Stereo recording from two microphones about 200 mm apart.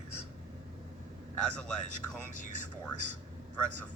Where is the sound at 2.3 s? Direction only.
40° left (ahead or behind).